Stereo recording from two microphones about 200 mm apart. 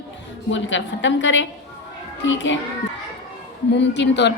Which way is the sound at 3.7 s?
60° left (ahead or behind).